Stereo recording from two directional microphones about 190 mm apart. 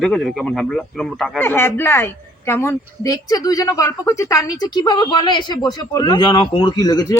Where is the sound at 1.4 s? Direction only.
10° left (ahead or behind).